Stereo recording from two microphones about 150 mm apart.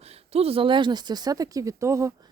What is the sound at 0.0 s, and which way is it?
Speech, 45° right (ahead or behind).